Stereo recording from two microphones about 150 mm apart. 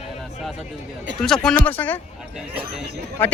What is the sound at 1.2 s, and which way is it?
Speech, 5° left (ahead or behind).